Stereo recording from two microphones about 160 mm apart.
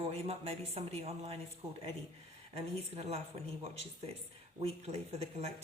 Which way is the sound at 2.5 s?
40° right (ahead or behind).